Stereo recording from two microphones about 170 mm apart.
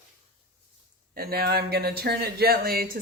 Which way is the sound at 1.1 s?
60° right (ahead or behind).